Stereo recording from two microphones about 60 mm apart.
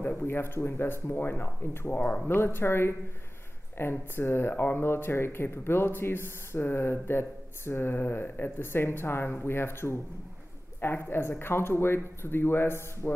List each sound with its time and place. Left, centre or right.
0.2 s speech: left